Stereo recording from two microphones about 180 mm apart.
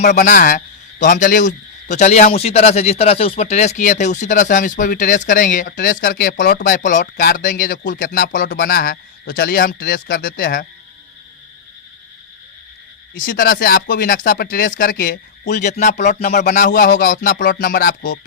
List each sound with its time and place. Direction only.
0.2 s a man's voice: 45° left (ahead or behind)
13.1 s a man's voice: 55° left (ahead or behind)